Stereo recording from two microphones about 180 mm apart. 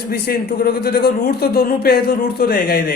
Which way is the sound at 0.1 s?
60° left (ahead or behind).